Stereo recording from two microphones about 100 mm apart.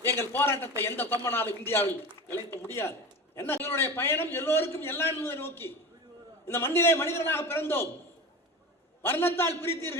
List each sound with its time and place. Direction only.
0.0 s a man's voice: 25° left (ahead or behind)
9.0 s a man's voice: 25° left (ahead or behind)